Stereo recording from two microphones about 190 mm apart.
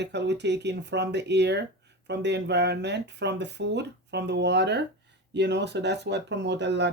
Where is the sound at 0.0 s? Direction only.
65° right (ahead or behind).